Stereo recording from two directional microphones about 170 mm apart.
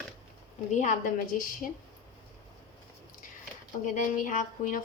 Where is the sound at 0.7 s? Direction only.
45° left (ahead or behind).